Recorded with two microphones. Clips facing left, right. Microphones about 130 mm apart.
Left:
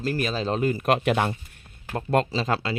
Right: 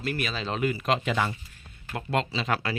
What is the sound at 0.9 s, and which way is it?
Speech, 55° left (ahead or behind).